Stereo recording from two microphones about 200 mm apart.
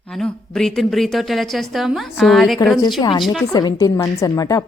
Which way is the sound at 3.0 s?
20° left (ahead or behind).